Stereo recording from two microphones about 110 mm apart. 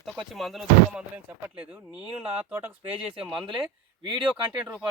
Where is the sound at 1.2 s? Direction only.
10° right (ahead or behind).